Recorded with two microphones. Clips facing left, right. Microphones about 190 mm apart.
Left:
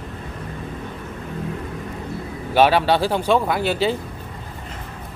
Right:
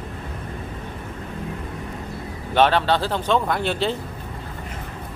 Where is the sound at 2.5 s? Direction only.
10° left (ahead or behind).